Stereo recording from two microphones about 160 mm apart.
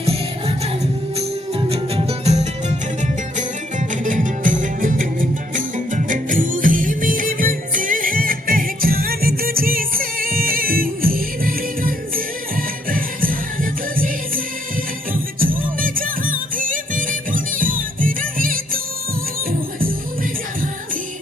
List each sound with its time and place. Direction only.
0.0 s music: 40° right (ahead or behind)
4.0 s music: 55° right (ahead or behind)